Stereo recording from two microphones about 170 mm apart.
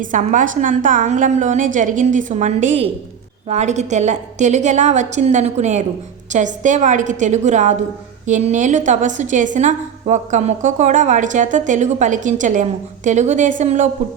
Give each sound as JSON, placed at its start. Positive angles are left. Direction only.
{"t": 0.0, "sound": "a woman's voice", "side_deg": -45}